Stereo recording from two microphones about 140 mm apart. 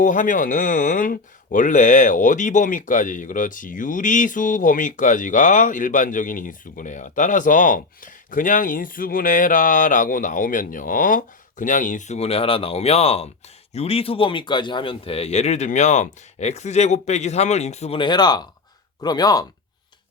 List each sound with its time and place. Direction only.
0.0 s speech: 65° left (ahead or behind); by 18.0 s 50° left (ahead or behind)
18.0 s speech: 30° left (ahead or behind)